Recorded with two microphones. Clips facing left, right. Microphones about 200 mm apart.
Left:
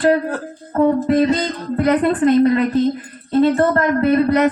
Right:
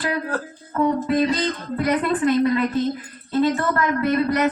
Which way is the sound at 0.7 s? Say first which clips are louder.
Left 5 dB; 45° left (ahead or behind).